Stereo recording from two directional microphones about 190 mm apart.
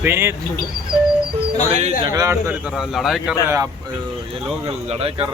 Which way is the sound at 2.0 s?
20° right (ahead or behind).